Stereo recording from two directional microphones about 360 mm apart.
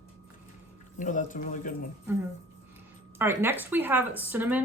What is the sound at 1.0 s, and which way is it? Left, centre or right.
Speech, left.